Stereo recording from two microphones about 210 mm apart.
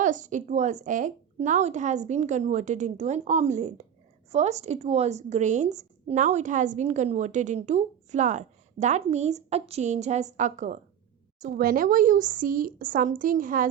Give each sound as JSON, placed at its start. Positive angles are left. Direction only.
{"t": 0.0, "sound": "a woman's voice", "side_deg": -35}